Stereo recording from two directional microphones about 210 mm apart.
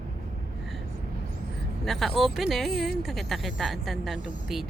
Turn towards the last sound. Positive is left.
turn(degrees=0)  # may be behind; listen again after turning